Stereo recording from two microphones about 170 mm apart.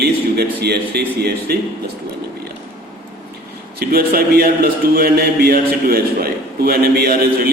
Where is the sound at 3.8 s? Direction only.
65° right (ahead or behind).